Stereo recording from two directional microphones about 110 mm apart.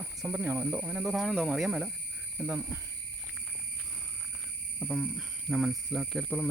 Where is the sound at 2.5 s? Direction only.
20° right (ahead or behind).